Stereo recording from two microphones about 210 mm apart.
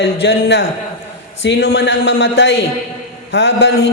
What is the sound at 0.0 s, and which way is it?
A man's voice, 60° left (ahead or behind).